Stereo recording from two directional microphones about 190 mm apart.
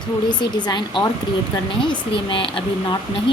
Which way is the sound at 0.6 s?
25° left (ahead or behind).